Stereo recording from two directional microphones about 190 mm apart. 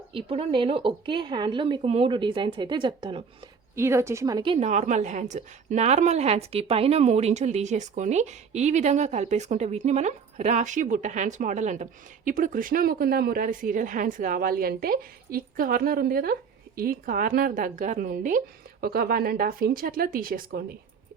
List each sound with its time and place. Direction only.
0.1 s a woman's voice: 30° right (ahead or behind)
3.8 s a woman's voice: 15° right (ahead or behind)
4.5 s a woman's voice: 35° right (ahead or behind)